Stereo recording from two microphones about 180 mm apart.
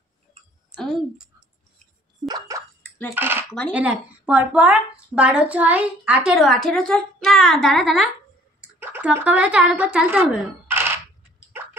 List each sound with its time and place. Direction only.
0.7 s a woman's voice: centre (ahead or behind)
2.2 s drip: 20° right (ahead or behind)
3.2 s speech: 10° right (ahead or behind)